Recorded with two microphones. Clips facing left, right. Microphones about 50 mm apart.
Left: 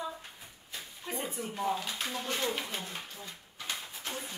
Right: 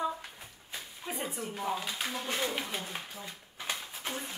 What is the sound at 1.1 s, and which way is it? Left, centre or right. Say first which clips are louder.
Frying: left 1 dB; centre.